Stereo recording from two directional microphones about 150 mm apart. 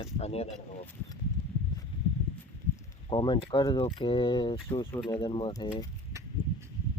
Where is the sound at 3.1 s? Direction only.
30° left (ahead or behind).